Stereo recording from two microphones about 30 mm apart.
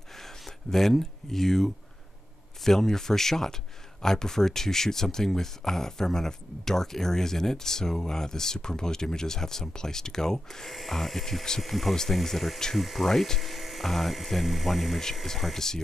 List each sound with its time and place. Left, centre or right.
0.1 s a sound: centre
2.6 s speech: centre
10.7 s speech: centre